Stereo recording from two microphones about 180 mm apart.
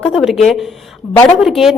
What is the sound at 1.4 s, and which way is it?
Speech, centre (ahead or behind).